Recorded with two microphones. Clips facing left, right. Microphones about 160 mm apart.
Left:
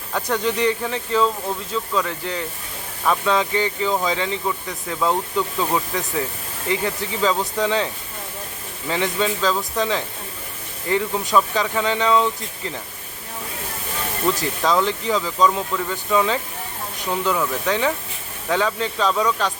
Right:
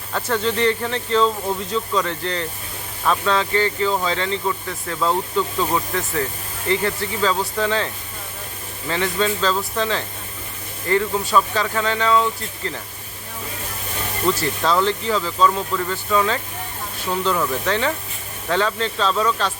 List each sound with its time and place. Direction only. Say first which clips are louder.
0.1 s speech: even; 15° left (ahead or behind)
8.9 s speech: even; 15° left (ahead or behind)
14.3 s speech: right 1 dB; 15° left (ahead or behind)